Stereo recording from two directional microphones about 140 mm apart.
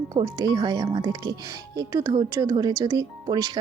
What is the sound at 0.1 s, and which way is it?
Speech, 30° right (ahead or behind).